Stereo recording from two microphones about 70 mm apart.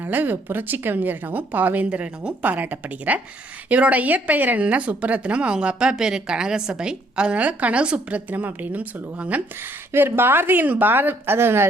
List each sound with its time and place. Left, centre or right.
0.0 s a woman's voice: right
9.9 s speech: right